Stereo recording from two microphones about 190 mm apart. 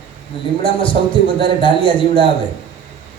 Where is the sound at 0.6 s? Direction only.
25° left (ahead or behind).